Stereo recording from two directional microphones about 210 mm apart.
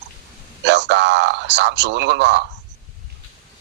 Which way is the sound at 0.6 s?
55° right (ahead or behind).